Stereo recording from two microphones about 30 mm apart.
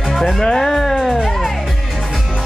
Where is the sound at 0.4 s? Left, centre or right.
Centre.